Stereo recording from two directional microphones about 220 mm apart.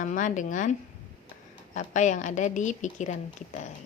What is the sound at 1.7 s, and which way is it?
A woman's voice, 35° left (ahead or behind).